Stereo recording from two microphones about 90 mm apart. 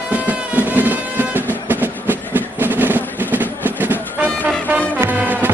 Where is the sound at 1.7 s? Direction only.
20° right (ahead or behind).